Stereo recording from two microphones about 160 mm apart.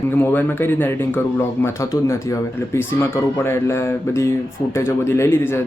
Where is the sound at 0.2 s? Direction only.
15° left (ahead or behind).